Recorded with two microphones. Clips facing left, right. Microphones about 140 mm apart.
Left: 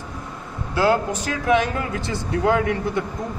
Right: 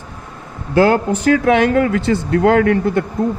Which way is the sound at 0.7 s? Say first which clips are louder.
Right 6 dB; 60° right (ahead or behind).